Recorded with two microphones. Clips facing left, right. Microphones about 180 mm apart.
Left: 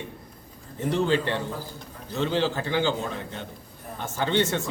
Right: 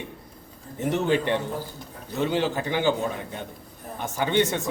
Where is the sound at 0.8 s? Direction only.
20° right (ahead or behind).